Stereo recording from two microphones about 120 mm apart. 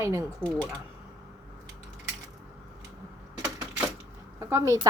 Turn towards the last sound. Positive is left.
turn(degrees=-25)  # may be behind; listen again after turning